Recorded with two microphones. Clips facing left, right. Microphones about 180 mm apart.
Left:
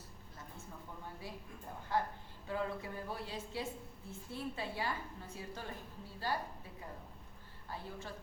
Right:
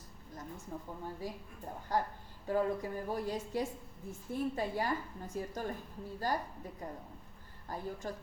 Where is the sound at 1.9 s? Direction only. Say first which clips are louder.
Right 2 dB; 40° right (ahead or behind).